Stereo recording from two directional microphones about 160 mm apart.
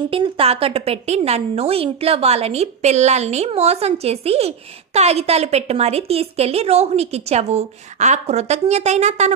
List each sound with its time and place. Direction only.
0.1 s a woman's voice: 35° right (ahead or behind)